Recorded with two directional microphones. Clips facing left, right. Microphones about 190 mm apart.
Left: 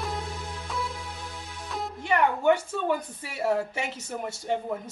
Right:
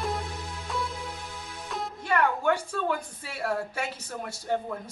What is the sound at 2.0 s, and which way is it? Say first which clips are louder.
A woman's voice: left 2 dB; 20° left (ahead or behind).